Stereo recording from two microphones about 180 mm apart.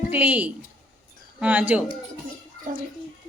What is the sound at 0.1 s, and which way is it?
A woman's voice, 10° right (ahead or behind).